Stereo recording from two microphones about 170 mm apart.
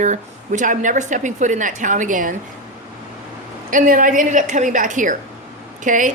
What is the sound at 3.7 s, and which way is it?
A woman's voice, 50° right (ahead or behind).